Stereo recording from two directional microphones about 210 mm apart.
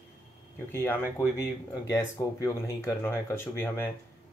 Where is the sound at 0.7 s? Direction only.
10° left (ahead or behind).